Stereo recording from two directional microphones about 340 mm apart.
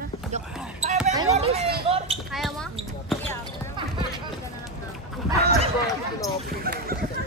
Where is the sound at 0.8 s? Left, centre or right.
Centre.